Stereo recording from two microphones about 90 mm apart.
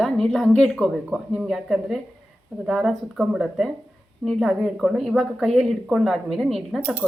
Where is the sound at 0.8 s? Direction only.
5° right (ahead or behind).